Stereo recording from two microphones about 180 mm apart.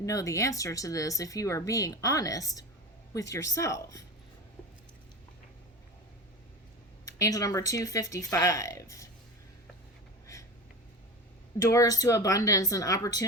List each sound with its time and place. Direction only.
0.0 s speech: 20° left (ahead or behind)
7.0 s speech: 20° left (ahead or behind)
11.7 s speech: 20° left (ahead or behind)